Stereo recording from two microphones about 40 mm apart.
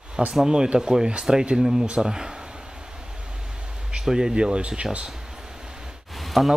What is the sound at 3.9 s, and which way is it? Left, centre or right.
Speech, centre.